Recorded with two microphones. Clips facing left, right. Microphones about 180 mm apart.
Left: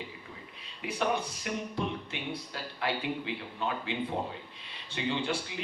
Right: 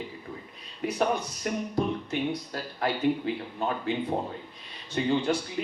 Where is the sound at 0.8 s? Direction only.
40° right (ahead or behind).